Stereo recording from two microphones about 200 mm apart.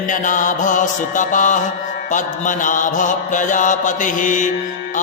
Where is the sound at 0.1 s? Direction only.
40° left (ahead or behind).